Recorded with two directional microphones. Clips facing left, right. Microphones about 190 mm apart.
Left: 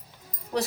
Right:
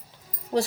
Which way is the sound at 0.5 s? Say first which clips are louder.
Right 4 dB; 35° right (ahead or behind).